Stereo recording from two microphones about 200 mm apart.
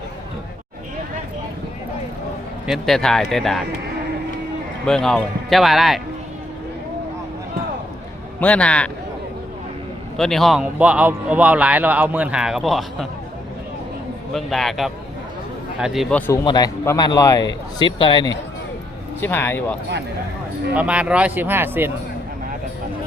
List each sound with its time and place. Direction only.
2.6 s a man's voice: centre (ahead or behind)
4.9 s a man's voice: 5° left (ahead or behind)
8.4 s a man's voice: 5° left (ahead or behind)
10.2 s a man's voice: centre (ahead or behind)
14.3 s a man's voice: centre (ahead or behind)
16.4 s speech: 20° left (ahead or behind)
19.2 s speech: 10° left (ahead or behind)
20.7 s speech: 5° right (ahead or behind)